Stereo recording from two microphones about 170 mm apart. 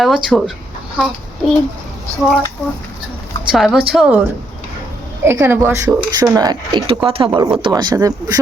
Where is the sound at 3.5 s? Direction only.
5° right (ahead or behind).